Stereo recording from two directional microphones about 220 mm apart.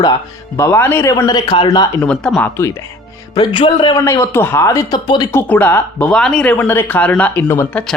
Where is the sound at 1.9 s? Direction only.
5° left (ahead or behind).